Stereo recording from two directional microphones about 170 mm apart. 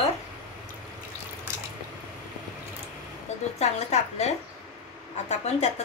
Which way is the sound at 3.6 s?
40° left (ahead or behind).